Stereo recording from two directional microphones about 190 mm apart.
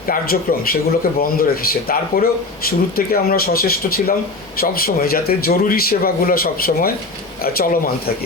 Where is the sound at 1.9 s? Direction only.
45° left (ahead or behind).